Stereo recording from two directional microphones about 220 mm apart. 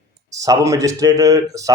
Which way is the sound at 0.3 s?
15° right (ahead or behind).